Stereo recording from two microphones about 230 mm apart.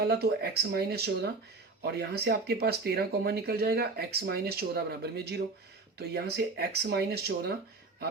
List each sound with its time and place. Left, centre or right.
0.0 s speech: right